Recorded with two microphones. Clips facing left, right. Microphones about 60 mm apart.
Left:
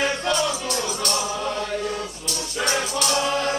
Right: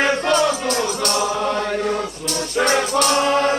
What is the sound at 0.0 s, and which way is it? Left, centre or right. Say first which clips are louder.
Music: right 6 dB; right.